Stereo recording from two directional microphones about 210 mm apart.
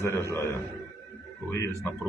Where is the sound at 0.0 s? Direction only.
10° left (ahead or behind).